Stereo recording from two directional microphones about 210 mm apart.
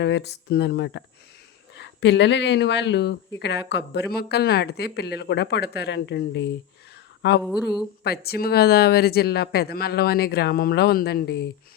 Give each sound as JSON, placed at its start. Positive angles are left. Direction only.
{"t": 0.0, "sound": "speech", "side_deg": 55}